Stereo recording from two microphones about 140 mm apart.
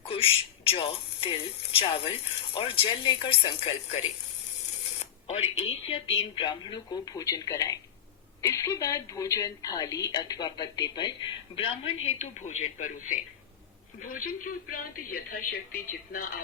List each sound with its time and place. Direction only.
0.0 s speech: 40° left (ahead or behind)
5.3 s a woman's voice: 45° left (ahead or behind); by 13.1 s 60° left (ahead or behind)
14.0 s speech: 80° left